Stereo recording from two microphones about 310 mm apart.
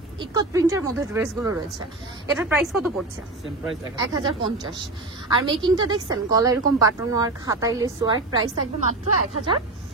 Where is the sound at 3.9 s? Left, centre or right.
Centre.